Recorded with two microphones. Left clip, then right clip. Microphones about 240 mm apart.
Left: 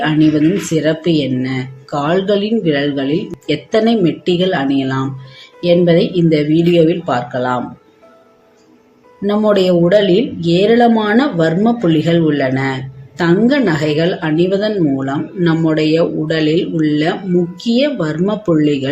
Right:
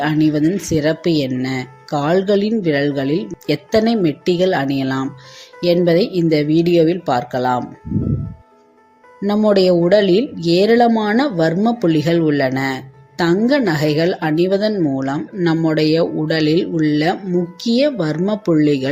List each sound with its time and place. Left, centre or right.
0.0 s speech: right
9.2 s speech: right